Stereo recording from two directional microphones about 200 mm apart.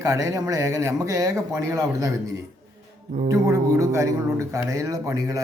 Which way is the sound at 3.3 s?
15° right (ahead or behind).